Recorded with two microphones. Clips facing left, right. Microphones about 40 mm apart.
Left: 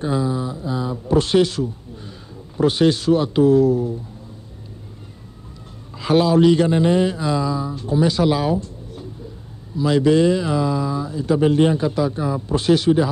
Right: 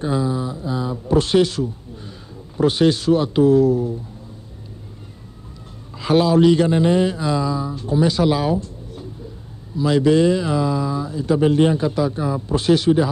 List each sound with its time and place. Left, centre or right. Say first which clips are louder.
0.0 s speech: even; centre
5.9 s speech: even; centre